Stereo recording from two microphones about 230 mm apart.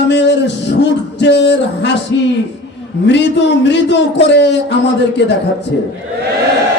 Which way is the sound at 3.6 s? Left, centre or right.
Left.